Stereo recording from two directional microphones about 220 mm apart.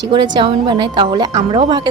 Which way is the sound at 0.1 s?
20° right (ahead or behind).